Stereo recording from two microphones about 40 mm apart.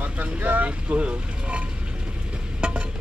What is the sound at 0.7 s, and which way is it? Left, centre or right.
Speech, right.